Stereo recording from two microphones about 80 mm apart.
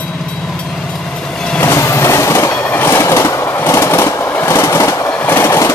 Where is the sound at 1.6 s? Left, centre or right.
Left.